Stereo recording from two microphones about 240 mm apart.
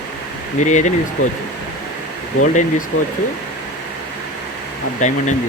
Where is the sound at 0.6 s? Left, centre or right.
Left.